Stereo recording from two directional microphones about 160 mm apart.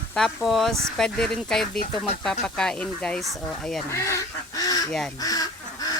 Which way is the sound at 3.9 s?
20° left (ahead or behind).